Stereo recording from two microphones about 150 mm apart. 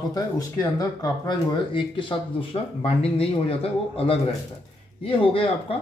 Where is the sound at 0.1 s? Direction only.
25° left (ahead or behind).